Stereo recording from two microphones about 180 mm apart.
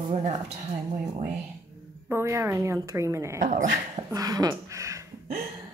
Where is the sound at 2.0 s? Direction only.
15° right (ahead or behind).